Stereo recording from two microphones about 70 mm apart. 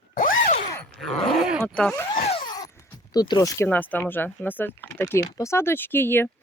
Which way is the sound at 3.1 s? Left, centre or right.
Left.